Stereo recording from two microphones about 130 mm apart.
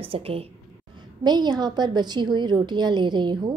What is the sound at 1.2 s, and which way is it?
A woman's voice, 35° right (ahead or behind).